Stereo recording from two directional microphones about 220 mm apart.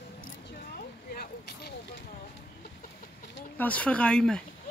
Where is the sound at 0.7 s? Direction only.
45° left (ahead or behind).